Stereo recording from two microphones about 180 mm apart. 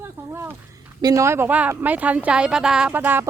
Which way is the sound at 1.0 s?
20° right (ahead or behind).